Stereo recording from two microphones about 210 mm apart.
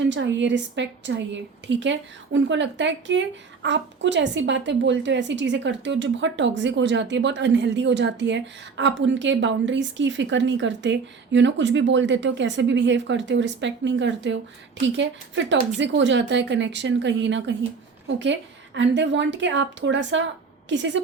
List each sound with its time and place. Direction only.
0.1 s a woman's voice: 60° right (ahead or behind)